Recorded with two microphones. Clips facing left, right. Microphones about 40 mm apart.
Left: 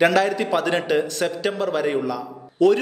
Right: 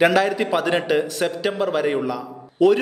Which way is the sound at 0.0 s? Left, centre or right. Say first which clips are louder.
Right 1 dB; centre.